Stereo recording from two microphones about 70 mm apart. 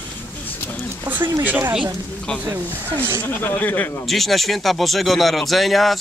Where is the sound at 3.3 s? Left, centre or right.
Left.